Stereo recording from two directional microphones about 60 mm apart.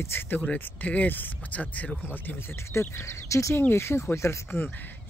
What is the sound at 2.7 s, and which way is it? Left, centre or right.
Speech, left.